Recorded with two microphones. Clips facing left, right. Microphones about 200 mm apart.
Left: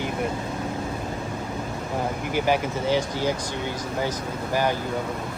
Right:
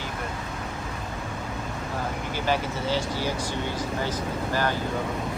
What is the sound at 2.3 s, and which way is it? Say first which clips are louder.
Speech: left 4 dB; 15° left (ahead or behind).